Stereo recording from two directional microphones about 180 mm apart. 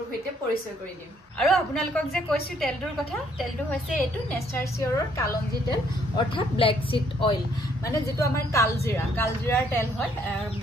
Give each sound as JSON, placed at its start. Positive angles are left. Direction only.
{"t": 1.4, "sound": "a woman's voice", "side_deg": 0}
{"t": 4.6, "sound": "a woman's voice", "side_deg": 15}
{"t": 7.9, "sound": "a woman's voice", "side_deg": 15}